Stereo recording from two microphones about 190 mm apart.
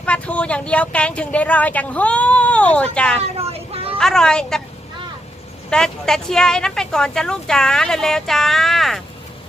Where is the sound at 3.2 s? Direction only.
30° right (ahead or behind).